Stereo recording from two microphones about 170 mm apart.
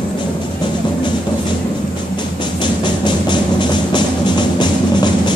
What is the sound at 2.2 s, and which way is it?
Music, 25° left (ahead or behind).